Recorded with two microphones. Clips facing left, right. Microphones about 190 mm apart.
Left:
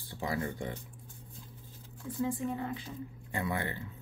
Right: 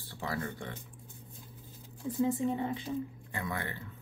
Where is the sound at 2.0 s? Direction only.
25° right (ahead or behind).